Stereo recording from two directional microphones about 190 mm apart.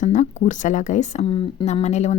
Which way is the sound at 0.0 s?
40° left (ahead or behind).